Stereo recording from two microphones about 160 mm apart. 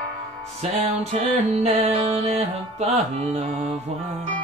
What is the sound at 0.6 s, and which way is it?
Music, 40° right (ahead or behind).